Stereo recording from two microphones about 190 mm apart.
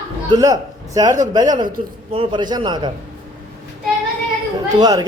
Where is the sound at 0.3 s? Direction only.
20° right (ahead or behind).